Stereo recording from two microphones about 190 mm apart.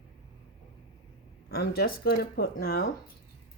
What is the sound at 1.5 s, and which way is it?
Speech, 55° left (ahead or behind).